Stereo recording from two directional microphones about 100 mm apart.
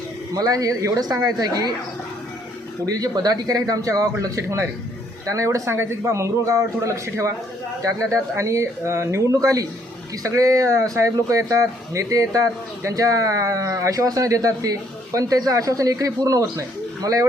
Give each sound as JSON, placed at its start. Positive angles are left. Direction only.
{"t": 0.3, "sound": "speech", "side_deg": -35}
{"t": 2.8, "sound": "speech", "side_deg": -35}